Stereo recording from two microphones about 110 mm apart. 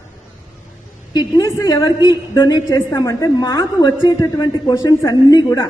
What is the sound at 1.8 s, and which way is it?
Speech, 45° left (ahead or behind).